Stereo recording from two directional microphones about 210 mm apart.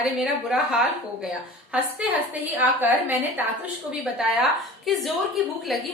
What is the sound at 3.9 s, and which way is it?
A woman's voice, 5° right (ahead or behind).